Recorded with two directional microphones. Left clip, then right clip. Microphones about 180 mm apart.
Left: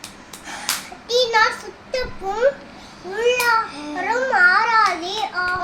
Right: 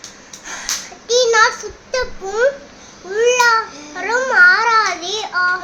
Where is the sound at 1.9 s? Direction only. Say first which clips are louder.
Right 3 dB; 20° right (ahead or behind).